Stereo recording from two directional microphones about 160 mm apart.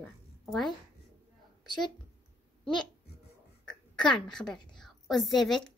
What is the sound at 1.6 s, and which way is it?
Speech, 25° left (ahead or behind).